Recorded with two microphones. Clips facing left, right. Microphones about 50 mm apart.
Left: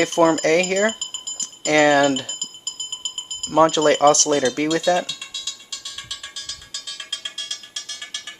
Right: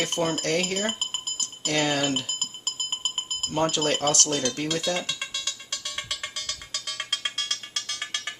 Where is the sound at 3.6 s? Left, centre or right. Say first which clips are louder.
Left 10 dB; left.